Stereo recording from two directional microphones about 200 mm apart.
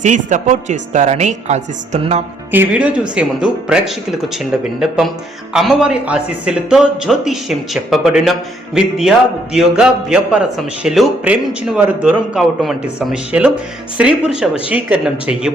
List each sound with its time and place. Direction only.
0.0 s a woman's voice: 40° right (ahead or behind)
2.5 s a man's voice: 10° right (ahead or behind)